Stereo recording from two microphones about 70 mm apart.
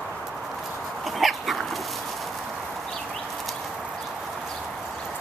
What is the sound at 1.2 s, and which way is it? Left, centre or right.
Dog, centre.